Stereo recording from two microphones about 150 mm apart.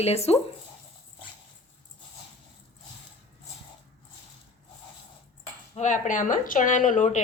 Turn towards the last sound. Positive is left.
turn(degrees=55)  # may be behind; listen again after turning